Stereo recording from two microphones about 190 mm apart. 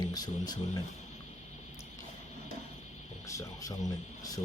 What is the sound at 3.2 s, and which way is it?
Speech, 15° left (ahead or behind).